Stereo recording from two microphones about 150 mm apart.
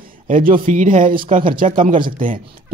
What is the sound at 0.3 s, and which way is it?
Speech, 65° right (ahead or behind).